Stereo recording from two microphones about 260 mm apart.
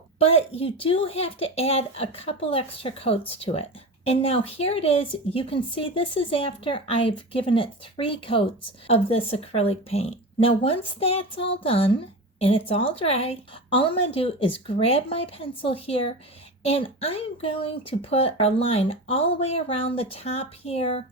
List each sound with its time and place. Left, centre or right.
0.2 s speech: left